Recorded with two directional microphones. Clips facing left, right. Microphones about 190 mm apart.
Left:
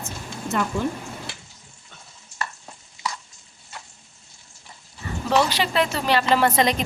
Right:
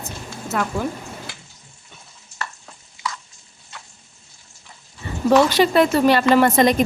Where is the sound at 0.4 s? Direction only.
Centre (ahead or behind).